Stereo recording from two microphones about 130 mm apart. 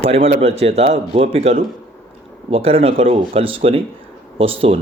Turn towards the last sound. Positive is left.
turn(degrees=-45)  # may be behind; listen again after turning